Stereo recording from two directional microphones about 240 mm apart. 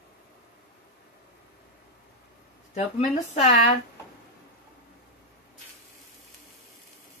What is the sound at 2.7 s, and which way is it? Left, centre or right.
Speech, left.